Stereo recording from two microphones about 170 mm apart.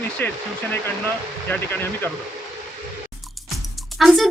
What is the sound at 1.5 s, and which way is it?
Speech, 10° left (ahead or behind).